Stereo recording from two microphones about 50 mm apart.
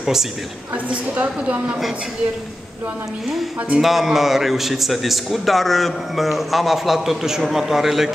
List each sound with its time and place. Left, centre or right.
0.0 s a woman's voice: centre
1.1 s a woman's voice: right
3.8 s a man's voice: centre